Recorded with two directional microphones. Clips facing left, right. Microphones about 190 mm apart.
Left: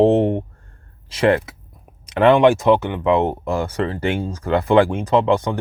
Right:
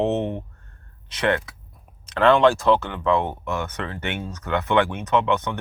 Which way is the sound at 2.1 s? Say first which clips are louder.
Left 4 dB; 20° left (ahead or behind).